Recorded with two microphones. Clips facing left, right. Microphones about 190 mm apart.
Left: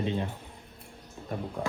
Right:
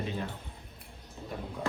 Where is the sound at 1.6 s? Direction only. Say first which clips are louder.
Even; 55° left (ahead or behind).